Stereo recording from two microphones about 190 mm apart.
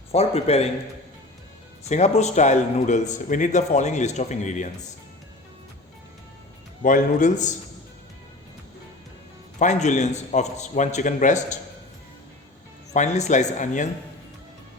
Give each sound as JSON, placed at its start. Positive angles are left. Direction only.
{"t": 0.1, "sound": "a man's voice", "side_deg": 35}
{"t": 1.9, "sound": "a man's voice", "side_deg": 35}
{"t": 6.8, "sound": "a man's voice", "side_deg": 45}
{"t": 9.6, "sound": "a man's voice", "side_deg": 40}
{"t": 12.9, "sound": "a man's voice", "side_deg": 35}